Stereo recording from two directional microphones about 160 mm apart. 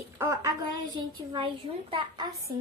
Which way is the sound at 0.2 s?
20° right (ahead or behind).